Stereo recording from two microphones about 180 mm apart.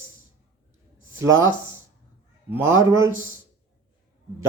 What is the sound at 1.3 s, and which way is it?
Speech, 90° right.